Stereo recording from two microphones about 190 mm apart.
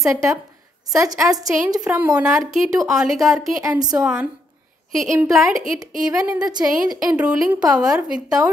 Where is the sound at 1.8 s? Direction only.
10° right (ahead or behind).